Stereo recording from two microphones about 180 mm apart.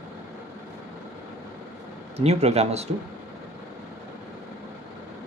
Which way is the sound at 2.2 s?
35° right (ahead or behind).